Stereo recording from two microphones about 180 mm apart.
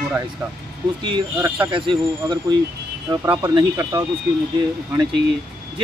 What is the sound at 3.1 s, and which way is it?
Speech, 15° right (ahead or behind).